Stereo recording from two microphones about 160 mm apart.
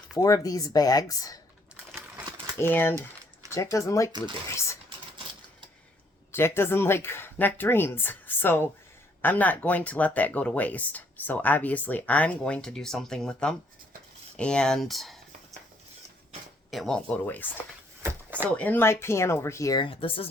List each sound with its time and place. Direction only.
0.2 s speech: 20° left (ahead or behind)
1.7 s crumpling: 10° right (ahead or behind)
2.6 s speech: 15° left (ahead or behind)
6.3 s speech: 15° left (ahead or behind)
16.7 s speech: 5° left (ahead or behind)
18.0 s a sound: 15° right (ahead or behind)
18.5 s speech: 10° left (ahead or behind)
19.8 s speech: 35° left (ahead or behind)